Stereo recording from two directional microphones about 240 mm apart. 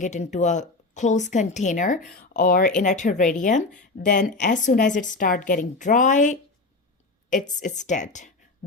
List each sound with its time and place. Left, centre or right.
0.0 s a woman's voice: left